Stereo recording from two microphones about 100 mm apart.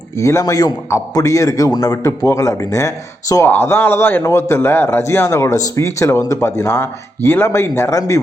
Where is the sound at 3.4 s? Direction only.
20° left (ahead or behind).